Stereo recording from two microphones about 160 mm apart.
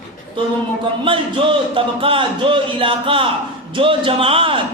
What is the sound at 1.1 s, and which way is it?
Speech, 30° right (ahead or behind).